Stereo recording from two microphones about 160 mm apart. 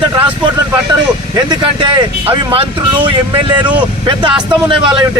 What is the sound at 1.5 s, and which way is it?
Speech, 30° right (ahead or behind).